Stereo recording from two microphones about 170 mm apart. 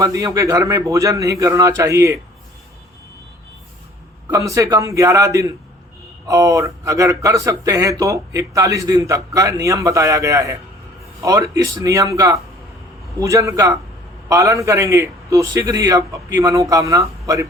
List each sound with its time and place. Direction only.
0.0 s speech: 20° right (ahead or behind)
4.3 s speech: 20° right (ahead or behind)